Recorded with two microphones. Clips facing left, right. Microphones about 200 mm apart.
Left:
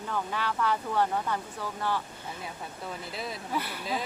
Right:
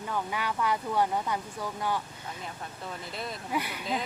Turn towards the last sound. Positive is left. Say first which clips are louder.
# right 1 dB
turn(degrees=-15)  # may be behind; listen again after turning